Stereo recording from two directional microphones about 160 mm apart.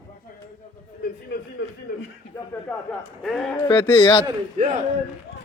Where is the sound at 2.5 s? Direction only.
10° left (ahead or behind).